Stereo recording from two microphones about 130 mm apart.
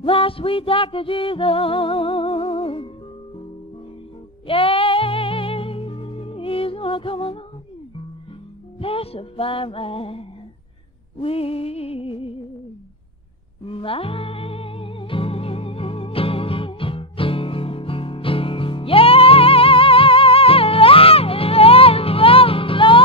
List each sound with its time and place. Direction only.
0.0 s music: 45° left (ahead or behind)
4.5 s music: 45° left (ahead or behind)
8.7 s music: 45° left (ahead or behind)
13.7 s music: 45° left (ahead or behind)